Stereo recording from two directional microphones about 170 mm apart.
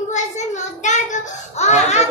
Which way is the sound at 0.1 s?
45° left (ahead or behind).